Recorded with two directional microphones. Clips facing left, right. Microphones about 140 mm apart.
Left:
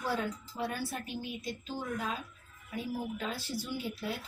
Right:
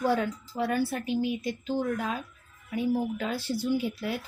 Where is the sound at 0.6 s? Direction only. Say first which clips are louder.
Right 9 dB; 80° right.